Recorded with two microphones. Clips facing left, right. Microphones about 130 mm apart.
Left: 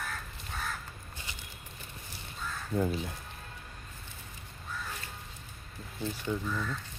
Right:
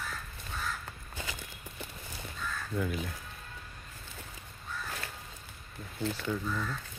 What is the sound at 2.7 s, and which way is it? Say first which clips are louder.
Speech: left 4 dB; 30° left (ahead or behind).